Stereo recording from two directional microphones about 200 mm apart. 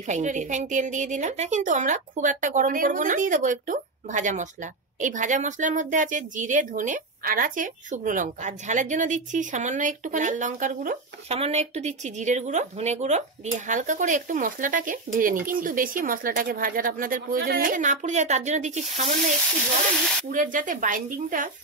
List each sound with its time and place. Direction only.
0.0 s speech: 35° right (ahead or behind)
20.2 s speech: 40° right (ahead or behind)